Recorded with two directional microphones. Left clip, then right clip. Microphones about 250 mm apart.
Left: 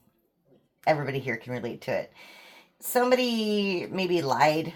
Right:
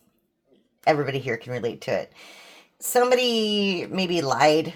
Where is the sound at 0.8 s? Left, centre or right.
Right.